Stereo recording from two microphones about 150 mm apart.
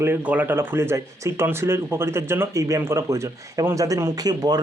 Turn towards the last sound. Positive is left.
turn(degrees=-25)  # may be behind; listen again after turning